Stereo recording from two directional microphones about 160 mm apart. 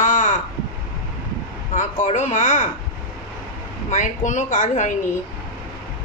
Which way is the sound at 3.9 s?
50° left (ahead or behind).